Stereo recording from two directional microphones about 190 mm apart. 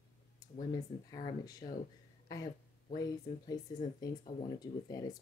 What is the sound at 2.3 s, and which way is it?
Speech, 20° left (ahead or behind).